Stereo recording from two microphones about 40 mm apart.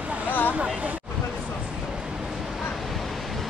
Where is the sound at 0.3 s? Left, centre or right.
Left.